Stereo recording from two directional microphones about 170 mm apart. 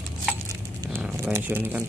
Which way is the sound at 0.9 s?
10° right (ahead or behind).